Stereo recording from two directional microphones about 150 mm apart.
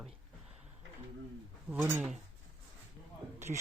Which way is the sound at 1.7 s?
15° right (ahead or behind).